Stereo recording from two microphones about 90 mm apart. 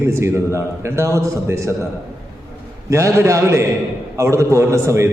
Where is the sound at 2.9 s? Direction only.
35° right (ahead or behind).